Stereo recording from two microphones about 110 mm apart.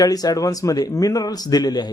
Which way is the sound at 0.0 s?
35° left (ahead or behind).